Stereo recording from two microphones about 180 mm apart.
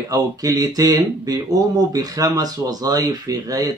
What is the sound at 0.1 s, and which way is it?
Speech, 20° right (ahead or behind).